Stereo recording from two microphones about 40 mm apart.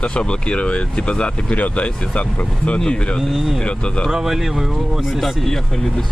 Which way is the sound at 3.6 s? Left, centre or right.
Left.